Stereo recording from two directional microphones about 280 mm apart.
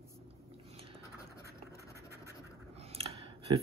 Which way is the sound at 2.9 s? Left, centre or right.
Right.